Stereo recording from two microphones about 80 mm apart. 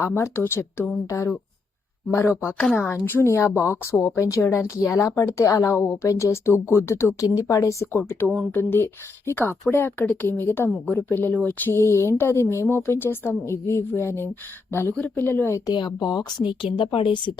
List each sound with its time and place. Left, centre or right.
0.1 s speech: left
2.1 s speech: left
2.7 s speech: left
3.0 s a woman's voice: left
8.5 s speech: left
11.9 s a woman's voice: left
15.7 s a woman's voice: left